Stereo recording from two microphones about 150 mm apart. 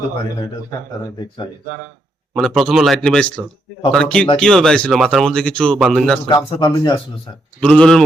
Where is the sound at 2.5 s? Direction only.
Centre (ahead or behind).